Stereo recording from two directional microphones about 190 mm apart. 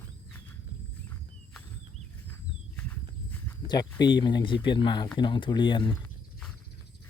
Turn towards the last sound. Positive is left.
turn(degrees=0)  # may be behind; listen again after turning